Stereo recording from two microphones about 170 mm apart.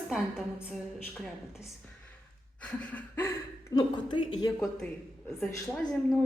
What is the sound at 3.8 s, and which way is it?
Speech, 25° left (ahead or behind).